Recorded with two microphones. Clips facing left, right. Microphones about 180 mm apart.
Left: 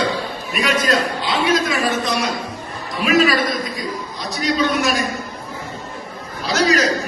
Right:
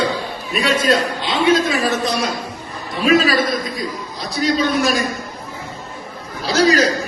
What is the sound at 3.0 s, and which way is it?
Speech, 35° right (ahead or behind).